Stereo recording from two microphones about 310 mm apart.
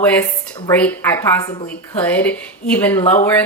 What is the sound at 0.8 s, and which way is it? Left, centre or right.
A woman's voice, centre.